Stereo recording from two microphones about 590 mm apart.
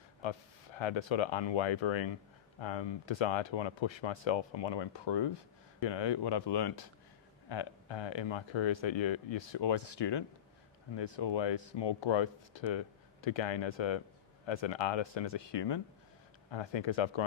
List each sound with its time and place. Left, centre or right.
0.2 s speech: left